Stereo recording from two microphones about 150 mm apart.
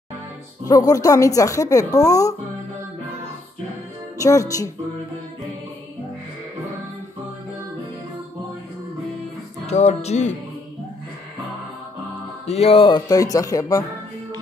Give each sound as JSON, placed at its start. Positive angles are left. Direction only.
{"t": 0.7, "sound": "speech", "side_deg": 25}
{"t": 4.2, "sound": "speech", "side_deg": 20}
{"t": 9.7, "sound": "speech", "side_deg": 45}
{"t": 12.4, "sound": "speech", "side_deg": 45}